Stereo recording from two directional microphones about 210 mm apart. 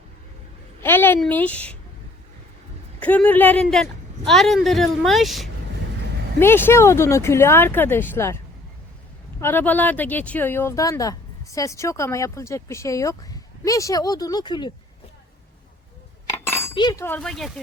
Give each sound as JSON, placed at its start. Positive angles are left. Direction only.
{"t": 0.8, "sound": "speech", "side_deg": 10}
{"t": 3.0, "sound": "a woman's voice", "side_deg": 5}
{"t": 6.4, "sound": "speech", "side_deg": 10}
{"t": 9.4, "sound": "speech", "side_deg": 10}
{"t": 16.3, "sound": "chink", "side_deg": 10}
{"t": 16.7, "sound": "speech", "side_deg": 20}